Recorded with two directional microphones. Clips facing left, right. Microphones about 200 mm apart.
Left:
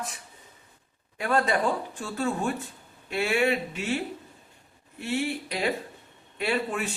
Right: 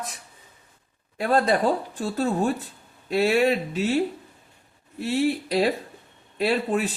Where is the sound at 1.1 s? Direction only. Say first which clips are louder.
Right 4 dB; 35° right (ahead or behind).